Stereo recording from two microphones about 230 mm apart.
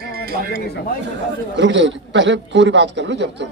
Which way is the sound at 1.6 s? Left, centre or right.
Right.